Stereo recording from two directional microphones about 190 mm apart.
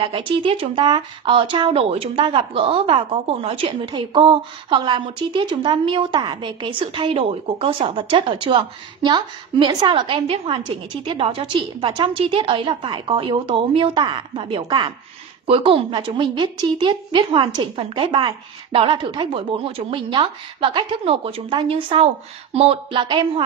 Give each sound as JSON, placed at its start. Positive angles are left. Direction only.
{"t": 0.0, "sound": "speech", "side_deg": -25}